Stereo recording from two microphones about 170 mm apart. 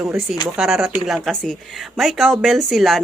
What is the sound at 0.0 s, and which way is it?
Speech, 5° right (ahead or behind).